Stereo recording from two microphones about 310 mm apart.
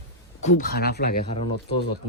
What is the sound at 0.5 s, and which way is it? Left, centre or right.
Speech, left.